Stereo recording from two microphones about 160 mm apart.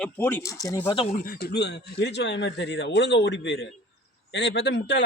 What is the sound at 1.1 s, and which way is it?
Speech, 65° left (ahead or behind).